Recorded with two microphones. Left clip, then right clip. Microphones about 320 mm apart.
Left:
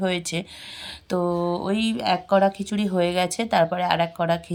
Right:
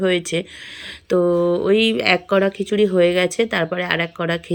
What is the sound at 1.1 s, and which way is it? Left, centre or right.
Speech, left.